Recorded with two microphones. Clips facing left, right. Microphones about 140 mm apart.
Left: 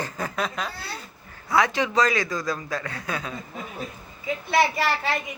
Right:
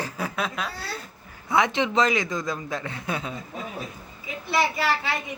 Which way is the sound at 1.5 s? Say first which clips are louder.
Even; 20° right (ahead or behind).